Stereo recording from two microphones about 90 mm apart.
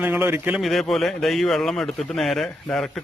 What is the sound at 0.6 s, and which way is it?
Speech, centre (ahead or behind).